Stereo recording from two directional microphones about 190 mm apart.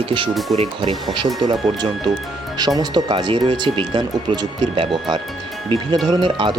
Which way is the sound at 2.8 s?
20° right (ahead or behind).